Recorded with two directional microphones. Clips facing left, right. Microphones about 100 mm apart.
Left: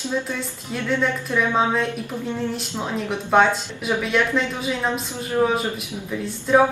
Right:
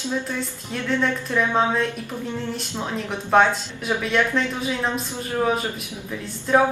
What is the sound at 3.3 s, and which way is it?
A woman's voice, centre (ahead or behind).